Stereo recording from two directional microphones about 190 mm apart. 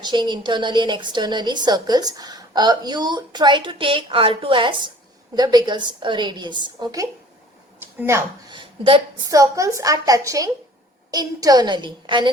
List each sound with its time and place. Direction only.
0.0 s a woman's voice: 25° right (ahead or behind)
8.5 s a woman's voice: 25° right (ahead or behind)